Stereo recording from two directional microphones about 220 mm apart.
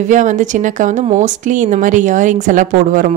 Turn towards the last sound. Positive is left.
turn(degrees=-35)  # may be behind; listen again after turning